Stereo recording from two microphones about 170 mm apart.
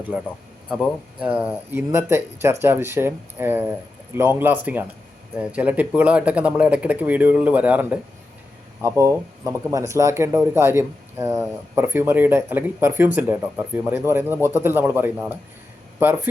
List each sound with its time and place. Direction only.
0.7 s speech: 5° right (ahead or behind)
8.8 s speech: 20° right (ahead or behind)